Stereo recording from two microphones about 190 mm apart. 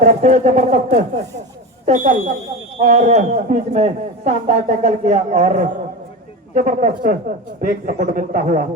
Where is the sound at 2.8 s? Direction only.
35° right (ahead or behind).